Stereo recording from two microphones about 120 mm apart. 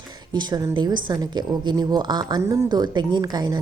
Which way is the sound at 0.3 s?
35° right (ahead or behind).